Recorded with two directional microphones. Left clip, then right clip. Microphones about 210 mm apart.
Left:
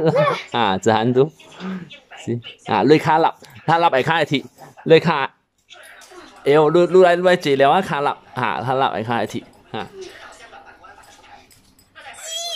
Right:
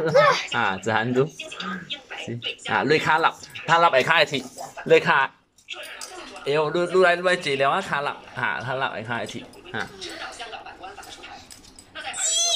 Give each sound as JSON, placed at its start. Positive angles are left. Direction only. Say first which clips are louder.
{"t": 0.0, "sound": "speech", "louder": "even", "side_deg": 20}
{"t": 6.4, "sound": "speech", "louder": "left 9 dB", "side_deg": 30}
{"t": 9.7, "sound": "speech", "louder": "left 1 dB", "side_deg": 10}